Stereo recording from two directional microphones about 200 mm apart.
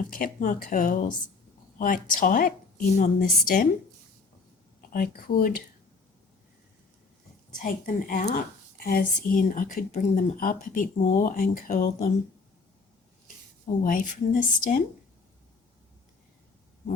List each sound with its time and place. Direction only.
0.1 s speech: 40° left (ahead or behind)
4.9 s speech: 45° left (ahead or behind)
7.6 s speech: 40° left (ahead or behind)
13.8 s speech: 40° left (ahead or behind)